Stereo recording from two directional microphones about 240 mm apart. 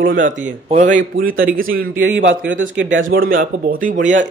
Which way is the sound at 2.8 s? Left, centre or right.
Right.